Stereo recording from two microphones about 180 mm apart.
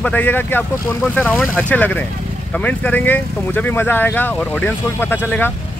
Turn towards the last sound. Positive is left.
turn(degrees=10)  # may be behind; listen again after turning